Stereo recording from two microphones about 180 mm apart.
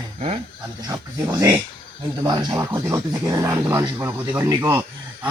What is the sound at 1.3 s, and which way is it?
Speech, 10° right (ahead or behind).